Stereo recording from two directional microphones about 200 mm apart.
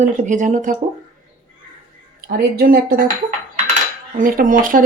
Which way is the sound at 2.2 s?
50° right (ahead or behind).